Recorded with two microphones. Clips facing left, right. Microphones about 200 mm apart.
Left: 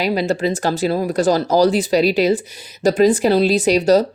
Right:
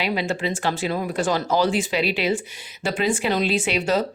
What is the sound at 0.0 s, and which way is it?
Speech, 40° left (ahead or behind).